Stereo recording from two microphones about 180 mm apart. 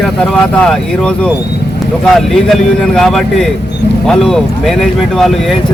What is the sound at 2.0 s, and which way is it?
Speech, centre (ahead or behind).